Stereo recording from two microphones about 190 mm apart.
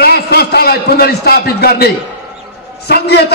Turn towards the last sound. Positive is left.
turn(degrees=60)  # may be behind; listen again after turning